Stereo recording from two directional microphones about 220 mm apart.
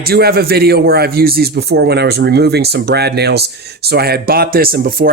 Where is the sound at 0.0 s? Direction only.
45° right (ahead or behind).